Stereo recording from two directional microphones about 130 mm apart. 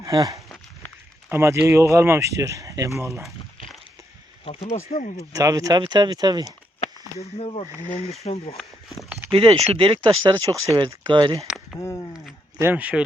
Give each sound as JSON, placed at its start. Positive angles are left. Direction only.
{"t": 0.0, "sound": "speech", "side_deg": -25}
{"t": 4.7, "sound": "speech", "side_deg": 60}
{"t": 5.3, "sound": "speech", "side_deg": -25}
{"t": 6.7, "sound": "a sound", "side_deg": 50}
{"t": 7.8, "sound": "speech", "side_deg": 65}
{"t": 8.5, "sound": "speech", "side_deg": 0}
{"t": 9.3, "sound": "speech", "side_deg": -45}
{"t": 11.4, "sound": "a sound", "side_deg": 0}
{"t": 11.8, "sound": "speech", "side_deg": 20}
{"t": 12.5, "sound": "speech", "side_deg": -15}